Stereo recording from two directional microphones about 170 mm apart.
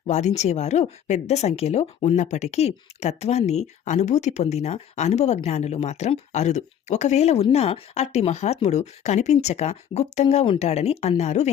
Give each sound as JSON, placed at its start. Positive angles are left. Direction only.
{"t": 0.1, "sound": "speech", "side_deg": 40}